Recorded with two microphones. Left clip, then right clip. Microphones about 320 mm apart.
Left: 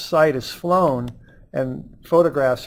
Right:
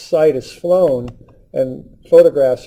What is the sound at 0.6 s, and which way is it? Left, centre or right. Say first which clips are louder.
Speech: right 5 dB; left.